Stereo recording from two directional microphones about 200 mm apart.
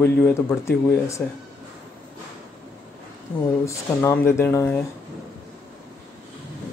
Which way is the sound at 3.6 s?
15° left (ahead or behind).